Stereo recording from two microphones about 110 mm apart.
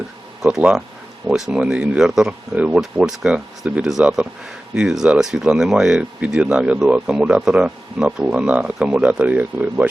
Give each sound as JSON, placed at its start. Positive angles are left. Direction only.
{"t": 0.4, "sound": "speech", "side_deg": -5}